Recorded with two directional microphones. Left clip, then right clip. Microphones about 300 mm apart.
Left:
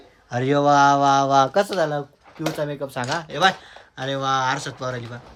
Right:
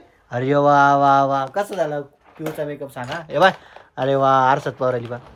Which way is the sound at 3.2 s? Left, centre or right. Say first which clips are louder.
Right 5 dB; centre.